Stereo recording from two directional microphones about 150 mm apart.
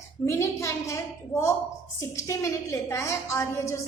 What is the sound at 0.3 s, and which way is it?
A woman's voice, 20° left (ahead or behind).